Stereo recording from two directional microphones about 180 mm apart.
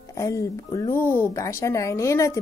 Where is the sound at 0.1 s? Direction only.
15° left (ahead or behind).